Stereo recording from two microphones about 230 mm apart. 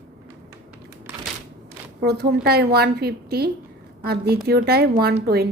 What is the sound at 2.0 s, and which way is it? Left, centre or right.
A woman's voice, right.